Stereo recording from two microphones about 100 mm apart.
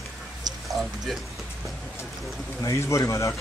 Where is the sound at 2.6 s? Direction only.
30° left (ahead or behind).